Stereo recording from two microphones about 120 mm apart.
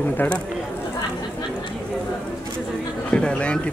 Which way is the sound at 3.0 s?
10° left (ahead or behind).